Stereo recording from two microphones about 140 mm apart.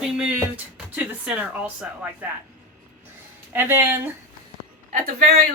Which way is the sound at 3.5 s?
15° right (ahead or behind).